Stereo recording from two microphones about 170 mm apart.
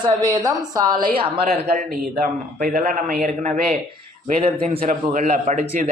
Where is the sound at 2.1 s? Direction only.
55° right (ahead or behind).